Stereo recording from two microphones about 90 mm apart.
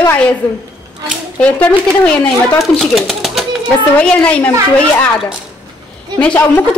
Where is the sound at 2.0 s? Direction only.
10° left (ahead or behind).